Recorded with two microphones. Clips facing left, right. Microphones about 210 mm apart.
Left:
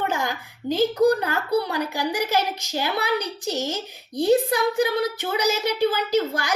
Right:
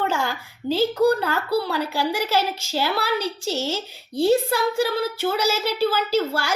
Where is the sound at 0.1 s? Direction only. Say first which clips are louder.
Right 1 dB; 15° left (ahead or behind).